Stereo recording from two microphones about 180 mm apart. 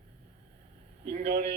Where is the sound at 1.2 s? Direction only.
65° right (ahead or behind).